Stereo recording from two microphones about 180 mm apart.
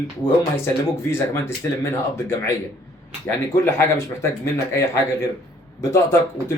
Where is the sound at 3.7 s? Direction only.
15° left (ahead or behind).